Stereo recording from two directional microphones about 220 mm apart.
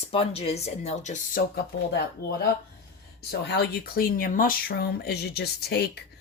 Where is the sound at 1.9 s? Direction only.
50° left (ahead or behind).